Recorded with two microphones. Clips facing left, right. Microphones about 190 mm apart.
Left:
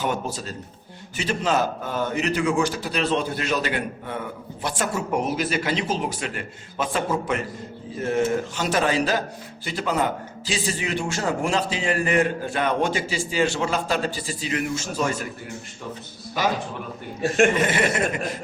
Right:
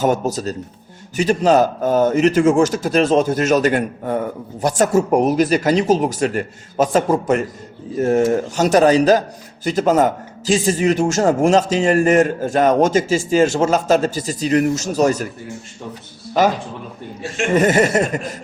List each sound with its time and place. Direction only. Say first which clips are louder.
0.0 s a man's voice: right 9 dB; 40° right (ahead or behind)
17.5 s a man's voice: right 8 dB; 40° right (ahead or behind)